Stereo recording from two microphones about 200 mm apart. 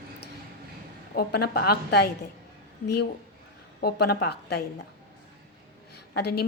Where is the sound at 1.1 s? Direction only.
50° left (ahead or behind).